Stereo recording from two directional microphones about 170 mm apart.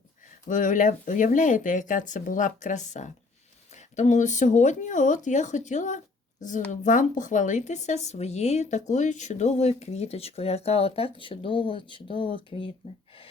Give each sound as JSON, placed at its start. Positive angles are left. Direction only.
{"t": 0.3, "sound": "speech", "side_deg": 50}